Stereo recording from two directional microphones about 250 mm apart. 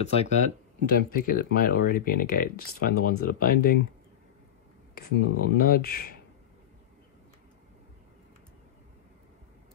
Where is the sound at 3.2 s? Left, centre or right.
Left.